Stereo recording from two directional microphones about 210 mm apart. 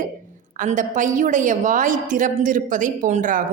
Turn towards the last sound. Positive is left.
turn(degrees=-35)  # may be behind; listen again after turning